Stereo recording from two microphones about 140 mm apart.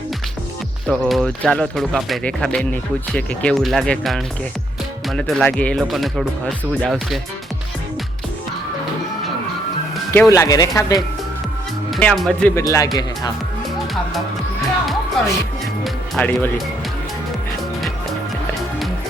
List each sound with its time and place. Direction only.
0.9 s speech: centre (ahead or behind)
10.1 s speech: 20° left (ahead or behind)
11.9 s speech: 5° left (ahead or behind)
12.5 s speech: 20° left (ahead or behind)
16.1 s speech: 10° left (ahead or behind)